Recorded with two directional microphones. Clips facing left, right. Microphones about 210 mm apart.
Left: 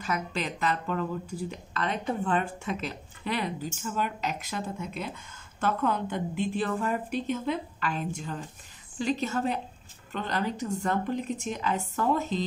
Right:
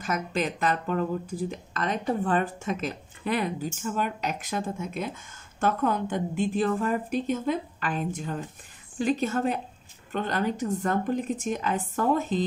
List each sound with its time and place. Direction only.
0.0 s speech: 45° right (ahead or behind)